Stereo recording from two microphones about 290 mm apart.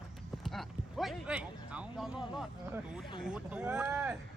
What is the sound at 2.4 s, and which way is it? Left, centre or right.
Speech, centre.